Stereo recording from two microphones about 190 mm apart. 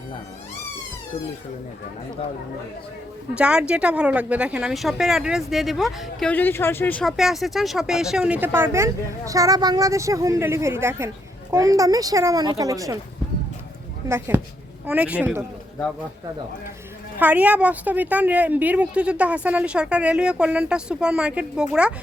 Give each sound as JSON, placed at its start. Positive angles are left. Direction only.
{"t": 3.3, "sound": "a woman's voice", "side_deg": -5}
{"t": 14.1, "sound": "speech", "side_deg": -10}
{"t": 17.2, "sound": "speech", "side_deg": -10}